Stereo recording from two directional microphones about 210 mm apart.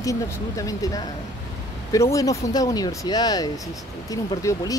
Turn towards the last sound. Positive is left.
turn(degrees=15)  # may be behind; listen again after turning